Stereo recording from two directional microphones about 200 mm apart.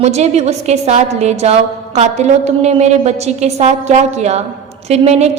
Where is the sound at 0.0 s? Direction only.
35° right (ahead or behind).